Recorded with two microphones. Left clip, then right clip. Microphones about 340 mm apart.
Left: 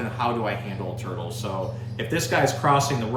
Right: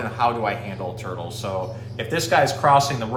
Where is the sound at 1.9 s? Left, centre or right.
Centre.